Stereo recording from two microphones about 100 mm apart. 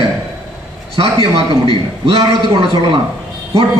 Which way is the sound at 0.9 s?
65° right (ahead or behind).